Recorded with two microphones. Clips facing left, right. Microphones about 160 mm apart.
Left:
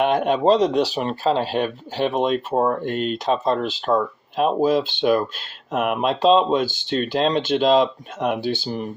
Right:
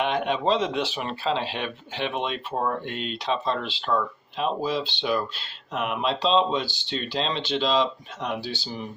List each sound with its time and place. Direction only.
0.0 s speech: 45° left (ahead or behind)